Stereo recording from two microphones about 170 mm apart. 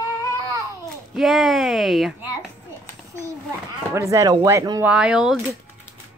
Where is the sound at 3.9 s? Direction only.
20° right (ahead or behind).